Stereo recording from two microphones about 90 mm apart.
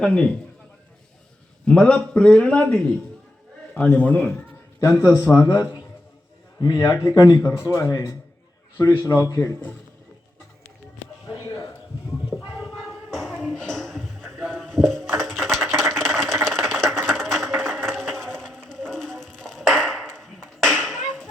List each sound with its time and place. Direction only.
0.0 s a man's voice: 10° left (ahead or behind)
1.6 s a man's voice: 10° left (ahead or behind)
5.0 s a man's voice: 30° left (ahead or behind)
6.6 s speech: 45° left (ahead or behind)
12.5 s a sound: centre (ahead or behind)